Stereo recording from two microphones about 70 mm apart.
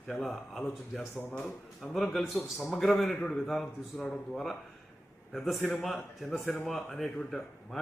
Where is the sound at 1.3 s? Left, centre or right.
Centre.